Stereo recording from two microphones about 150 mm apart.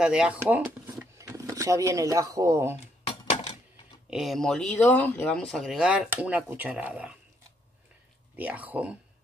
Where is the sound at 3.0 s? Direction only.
45° left (ahead or behind).